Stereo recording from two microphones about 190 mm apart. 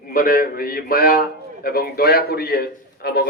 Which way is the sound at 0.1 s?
50° left (ahead or behind).